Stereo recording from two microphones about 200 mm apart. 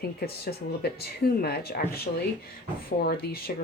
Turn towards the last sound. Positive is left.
turn(degrees=50)  # may be behind; listen again after turning